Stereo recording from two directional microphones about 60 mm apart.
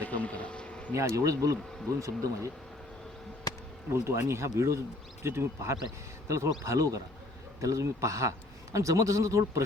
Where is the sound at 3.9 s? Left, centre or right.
Right.